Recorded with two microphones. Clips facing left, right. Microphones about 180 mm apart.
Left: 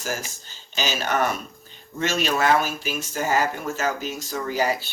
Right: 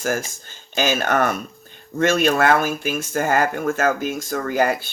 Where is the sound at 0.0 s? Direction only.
50° right (ahead or behind).